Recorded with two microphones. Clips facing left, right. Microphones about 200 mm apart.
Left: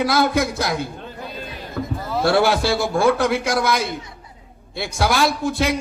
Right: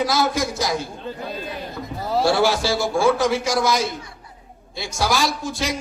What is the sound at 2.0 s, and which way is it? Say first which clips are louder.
A man's voice: even; 55° left (ahead or behind).